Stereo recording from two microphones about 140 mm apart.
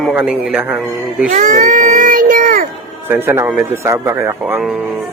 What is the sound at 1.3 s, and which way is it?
A child's voice, 65° right (ahead or behind).